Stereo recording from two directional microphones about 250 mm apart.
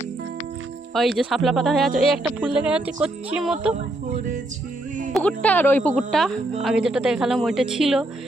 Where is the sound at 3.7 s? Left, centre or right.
Right.